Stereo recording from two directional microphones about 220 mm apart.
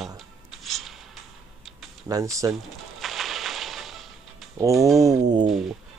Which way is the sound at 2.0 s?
15° right (ahead or behind).